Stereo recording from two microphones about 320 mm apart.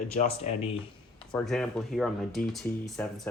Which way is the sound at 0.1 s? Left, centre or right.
Left.